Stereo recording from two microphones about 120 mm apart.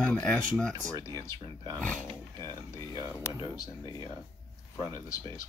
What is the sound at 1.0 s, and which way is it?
Speech, 25° left (ahead or behind).